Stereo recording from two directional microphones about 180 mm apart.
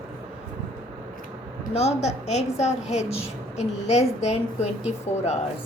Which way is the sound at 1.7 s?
35° left (ahead or behind).